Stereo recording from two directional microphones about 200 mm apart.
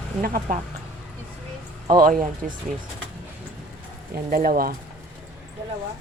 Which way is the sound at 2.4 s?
40° right (ahead or behind).